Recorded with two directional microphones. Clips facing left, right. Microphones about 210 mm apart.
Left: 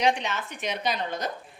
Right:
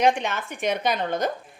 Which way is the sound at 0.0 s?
50° right (ahead or behind).